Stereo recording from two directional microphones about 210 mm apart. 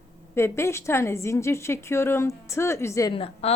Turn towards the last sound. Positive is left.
turn(degrees=25)  # may be behind; listen again after turning